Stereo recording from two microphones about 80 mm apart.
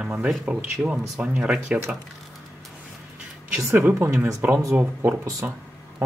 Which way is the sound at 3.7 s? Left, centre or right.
Right.